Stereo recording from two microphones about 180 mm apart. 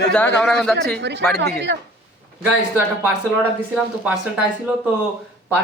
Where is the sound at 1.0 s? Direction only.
75° right (ahead or behind).